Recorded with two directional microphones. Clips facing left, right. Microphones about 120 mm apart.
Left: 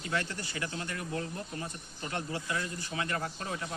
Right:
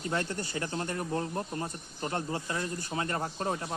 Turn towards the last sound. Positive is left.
turn(degrees=-35)  # may be behind; listen again after turning